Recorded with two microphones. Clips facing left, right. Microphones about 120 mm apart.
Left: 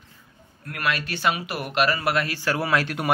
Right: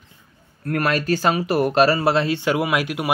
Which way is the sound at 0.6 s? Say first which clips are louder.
Right 7 dB; 40° right (ahead or behind).